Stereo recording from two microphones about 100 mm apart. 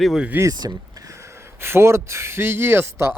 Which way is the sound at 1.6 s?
25° right (ahead or behind).